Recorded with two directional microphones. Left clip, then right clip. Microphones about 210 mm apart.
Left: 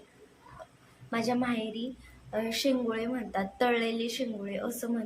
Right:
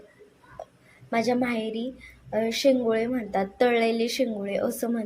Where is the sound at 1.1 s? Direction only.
20° right (ahead or behind).